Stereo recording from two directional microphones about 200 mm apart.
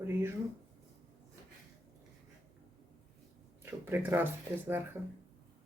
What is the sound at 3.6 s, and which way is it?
Speech, 10° right (ahead or behind).